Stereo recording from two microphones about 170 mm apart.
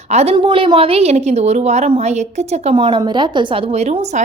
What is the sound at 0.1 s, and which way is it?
Speech, 40° right (ahead or behind).